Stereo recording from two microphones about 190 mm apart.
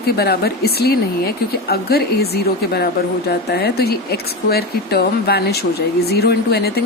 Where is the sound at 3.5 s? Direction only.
55° left (ahead or behind).